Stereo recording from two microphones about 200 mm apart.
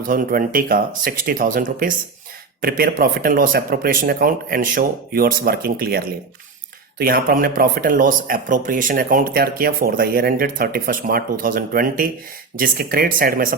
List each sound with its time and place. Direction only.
0.1 s speech: 45° right (ahead or behind)